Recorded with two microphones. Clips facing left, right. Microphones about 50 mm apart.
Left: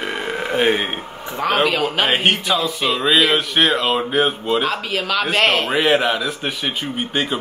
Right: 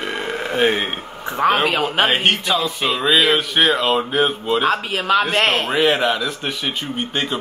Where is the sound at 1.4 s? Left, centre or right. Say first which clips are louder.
Right 1 dB; right.